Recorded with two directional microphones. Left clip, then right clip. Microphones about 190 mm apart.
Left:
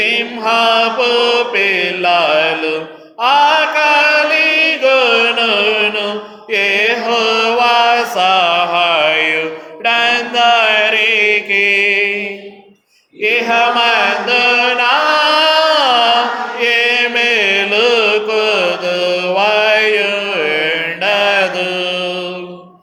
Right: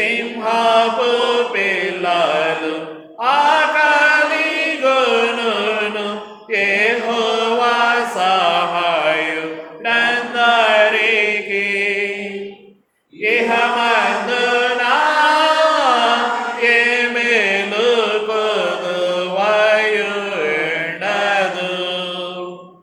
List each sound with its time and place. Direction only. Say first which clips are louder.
0.0 s mantra: left 4 dB; 35° left (ahead or behind)
3.2 s chant: left 3 dB; 30° left (ahead or behind)
6.5 s mantra: left 3 dB; 35° left (ahead or behind)
13.2 s chant: left 3 dB; 35° left (ahead or behind)
16.6 s mantra: left 2 dB; 35° left (ahead or behind)